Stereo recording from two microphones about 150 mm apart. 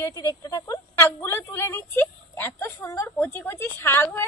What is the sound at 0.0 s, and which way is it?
A woman's voice, 25° left (ahead or behind).